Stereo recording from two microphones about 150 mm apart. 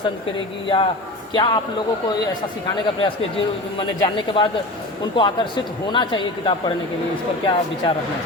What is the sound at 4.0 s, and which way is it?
A man's voice, 25° left (ahead or behind).